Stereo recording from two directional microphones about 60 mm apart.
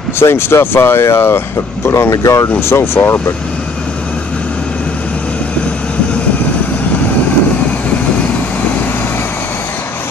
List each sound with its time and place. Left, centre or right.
0.2 s speech: left
1.9 s speech: left
2.6 s speech: left